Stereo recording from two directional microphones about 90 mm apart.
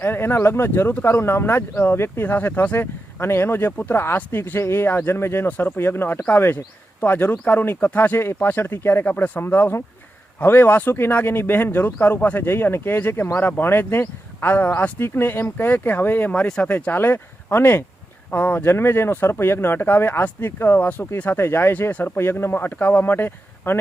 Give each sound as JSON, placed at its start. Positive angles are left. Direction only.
{"t": 0.0, "sound": "speech", "side_deg": 25}